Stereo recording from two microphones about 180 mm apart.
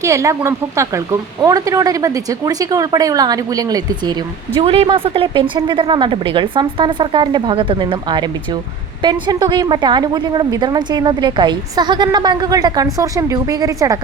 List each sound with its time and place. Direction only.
0.0 s a woman's voice: 15° right (ahead or behind)
4.6 s a woman's voice: 30° right (ahead or behind)